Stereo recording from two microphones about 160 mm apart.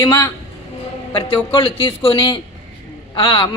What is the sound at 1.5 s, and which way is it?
A woman's voice, 35° left (ahead or behind).